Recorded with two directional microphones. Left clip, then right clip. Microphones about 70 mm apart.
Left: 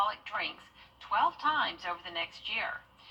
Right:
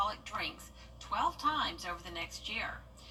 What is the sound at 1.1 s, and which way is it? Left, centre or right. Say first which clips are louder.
Speech: left 4 dB; right.